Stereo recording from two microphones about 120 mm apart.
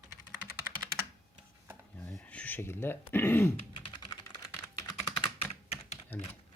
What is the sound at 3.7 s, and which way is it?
Typing, 40° left (ahead or behind).